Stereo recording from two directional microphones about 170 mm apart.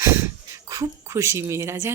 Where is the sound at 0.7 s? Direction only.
20° right (ahead or behind).